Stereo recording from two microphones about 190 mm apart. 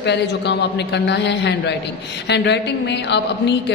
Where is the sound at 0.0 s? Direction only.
65° left (ahead or behind).